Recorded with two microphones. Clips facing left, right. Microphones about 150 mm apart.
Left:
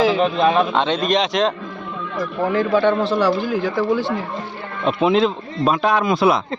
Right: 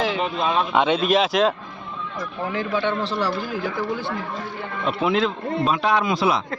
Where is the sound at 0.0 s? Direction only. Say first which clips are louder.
Left 7 dB; 90° left.